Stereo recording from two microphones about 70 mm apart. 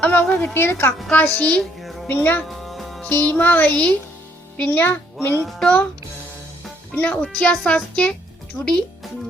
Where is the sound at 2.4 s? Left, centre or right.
Centre.